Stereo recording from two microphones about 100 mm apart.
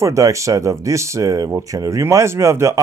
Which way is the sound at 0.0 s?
30° right (ahead or behind).